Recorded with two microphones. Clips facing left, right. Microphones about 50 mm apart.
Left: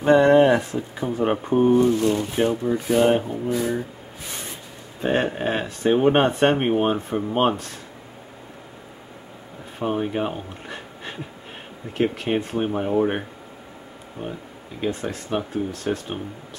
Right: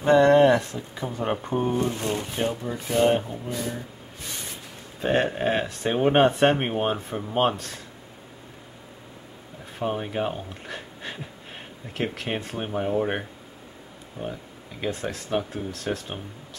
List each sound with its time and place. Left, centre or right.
0.0 s speech: centre
5.0 s speech: centre
9.8 s speech: centre
14.2 s speech: left
14.8 s speech: centre